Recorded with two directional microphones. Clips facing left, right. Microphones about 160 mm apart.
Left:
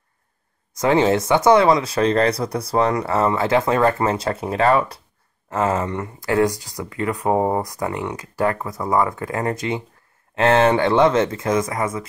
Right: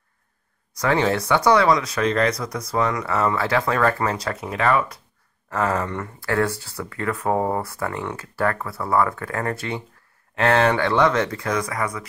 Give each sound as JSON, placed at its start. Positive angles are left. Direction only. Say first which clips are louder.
{"t": 0.7, "sound": "speech", "louder": "left 4 dB", "side_deg": 20}
{"t": 5.5, "sound": "speech", "louder": "left 2 dB", "side_deg": 20}